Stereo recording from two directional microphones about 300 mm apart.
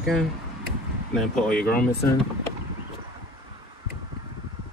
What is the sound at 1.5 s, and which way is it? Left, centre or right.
Speech, left.